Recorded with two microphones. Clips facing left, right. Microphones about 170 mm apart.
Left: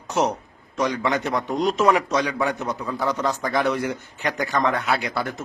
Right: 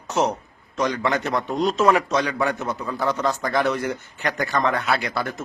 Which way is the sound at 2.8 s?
Centre (ahead or behind).